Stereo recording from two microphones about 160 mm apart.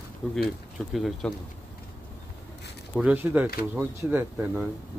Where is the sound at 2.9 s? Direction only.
10° right (ahead or behind).